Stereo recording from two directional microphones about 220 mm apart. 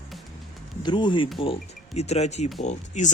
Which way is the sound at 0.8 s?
20° left (ahead or behind).